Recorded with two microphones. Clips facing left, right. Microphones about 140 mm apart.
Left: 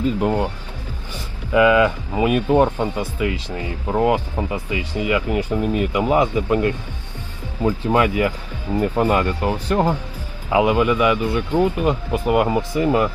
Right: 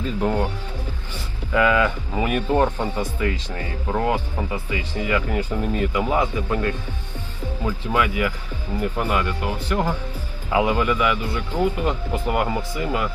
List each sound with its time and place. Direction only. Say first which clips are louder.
0.2 s speech: left 2 dB; 15° left (ahead or behind)
1.5 s speech: left 5 dB; 15° left (ahead or behind); by 9.8 s 35° left (ahead or behind)
10.5 s speech: left 4 dB; 20° left (ahead or behind)